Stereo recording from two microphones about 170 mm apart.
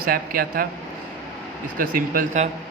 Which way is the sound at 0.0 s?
60° right (ahead or behind).